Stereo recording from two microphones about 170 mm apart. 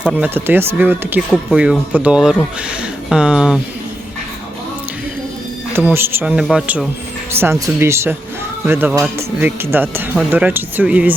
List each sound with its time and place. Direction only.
0.0 s speech: 5° right (ahead or behind)
5.7 s speech: 15° right (ahead or behind)